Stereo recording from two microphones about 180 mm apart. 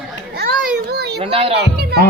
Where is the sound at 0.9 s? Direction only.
60° right (ahead or behind).